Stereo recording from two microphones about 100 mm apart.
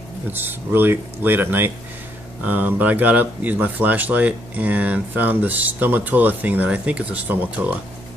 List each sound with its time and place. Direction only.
0.3 s speech: 20° right (ahead or behind)